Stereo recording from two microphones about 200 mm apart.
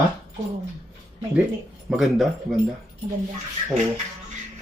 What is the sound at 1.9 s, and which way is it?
Speech, centre (ahead or behind).